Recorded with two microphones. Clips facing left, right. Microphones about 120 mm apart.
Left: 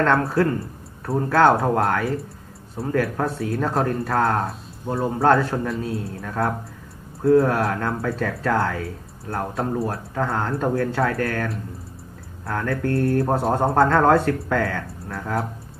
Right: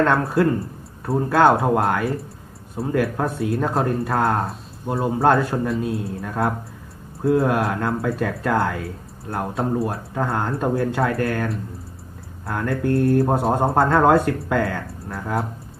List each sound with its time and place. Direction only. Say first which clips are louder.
0.0 s speech: right 1 dB; 5° right (ahead or behind)